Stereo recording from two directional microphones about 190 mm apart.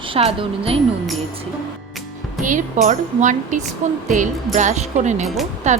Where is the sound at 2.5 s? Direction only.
40° right (ahead or behind).